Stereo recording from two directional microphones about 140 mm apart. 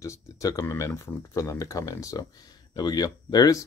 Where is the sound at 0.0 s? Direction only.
25° left (ahead or behind).